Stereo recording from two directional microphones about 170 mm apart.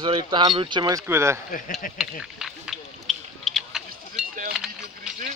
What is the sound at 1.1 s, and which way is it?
Speech, 15° right (ahead or behind).